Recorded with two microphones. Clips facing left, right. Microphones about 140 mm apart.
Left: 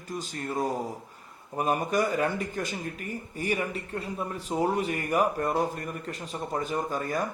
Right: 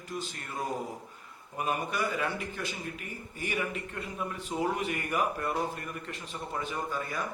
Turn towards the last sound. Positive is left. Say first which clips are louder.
# left 5 dB
turn(degrees=45)  # may be behind; listen again after turning